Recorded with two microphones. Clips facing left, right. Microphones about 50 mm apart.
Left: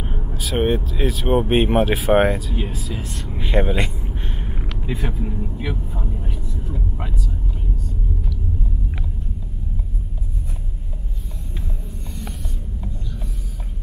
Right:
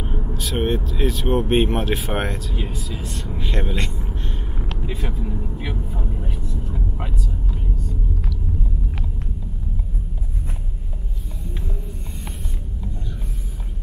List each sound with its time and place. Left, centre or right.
0.2 s speech: centre
4.9 s speech: centre
5.5 s vehicle: centre
6.2 s vehicle: centre